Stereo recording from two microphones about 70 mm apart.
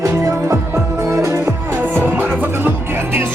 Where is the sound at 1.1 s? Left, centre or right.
Right.